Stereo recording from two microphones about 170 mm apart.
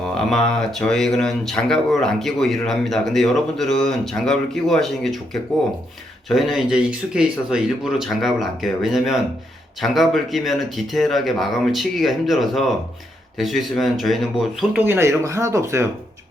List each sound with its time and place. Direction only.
0.1 s speech: centre (ahead or behind)
14.8 s speech: 15° right (ahead or behind)